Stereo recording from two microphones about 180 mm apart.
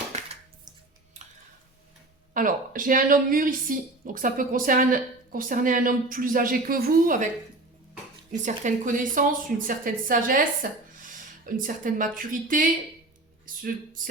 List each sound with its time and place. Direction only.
2.3 s a woman's voice: 50° right (ahead or behind)
8.4 s a woman's voice: 45° right (ahead or behind)